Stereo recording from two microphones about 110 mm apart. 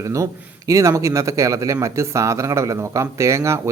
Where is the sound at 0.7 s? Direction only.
30° right (ahead or behind).